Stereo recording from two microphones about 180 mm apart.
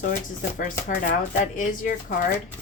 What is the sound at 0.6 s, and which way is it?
Speech, 50° left (ahead or behind).